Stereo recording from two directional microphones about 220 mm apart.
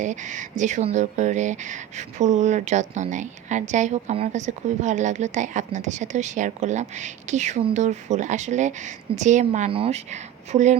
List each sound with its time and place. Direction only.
0.0 s speech: 35° right (ahead or behind)